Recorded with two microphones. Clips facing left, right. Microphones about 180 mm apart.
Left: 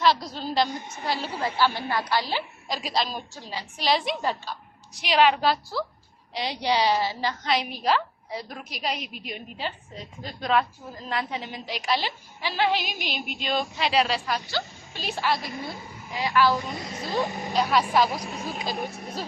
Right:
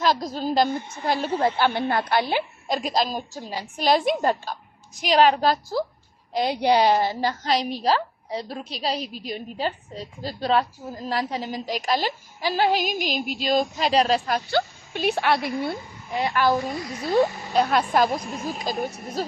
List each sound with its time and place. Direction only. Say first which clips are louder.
0.0 s a woman's voice: right 1 dB; 45° right (ahead or behind)
16.6 s a child's voice: right 4 dB; 25° left (ahead or behind)
17.5 s a woman's voice: left 2 dB; 55° right (ahead or behind)
18.2 s speech: right 2 dB; centre (ahead or behind)